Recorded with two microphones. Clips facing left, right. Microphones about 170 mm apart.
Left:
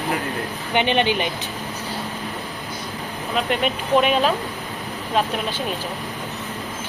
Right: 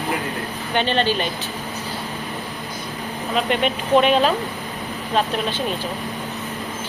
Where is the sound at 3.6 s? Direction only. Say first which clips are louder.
Right 2 dB; 5° left (ahead or behind).